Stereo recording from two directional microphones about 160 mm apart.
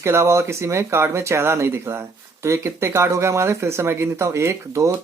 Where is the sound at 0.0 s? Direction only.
15° right (ahead or behind).